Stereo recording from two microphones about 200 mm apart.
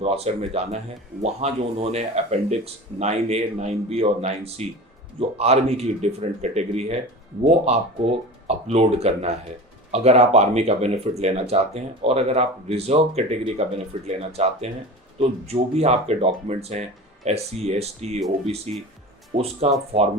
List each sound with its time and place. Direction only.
0.0 s speech: 30° right (ahead or behind)